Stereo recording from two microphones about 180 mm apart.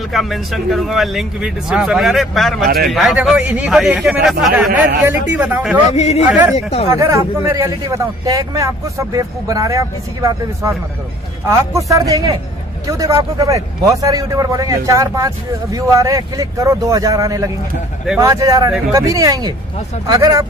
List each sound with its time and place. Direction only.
0.1 s a man's voice: centre (ahead or behind)
5.9 s speech: 35° left (ahead or behind)
6.9 s a man's voice: 15° right (ahead or behind)